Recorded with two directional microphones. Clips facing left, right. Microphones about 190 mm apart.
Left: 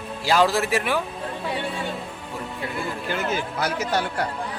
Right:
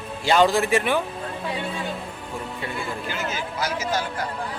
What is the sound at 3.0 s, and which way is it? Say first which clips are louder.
Speech: left 3 dB; 55° left (ahead or behind).